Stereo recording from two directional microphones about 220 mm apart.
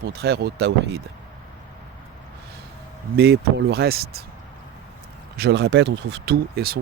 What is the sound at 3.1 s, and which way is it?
Speech, 50° right (ahead or behind).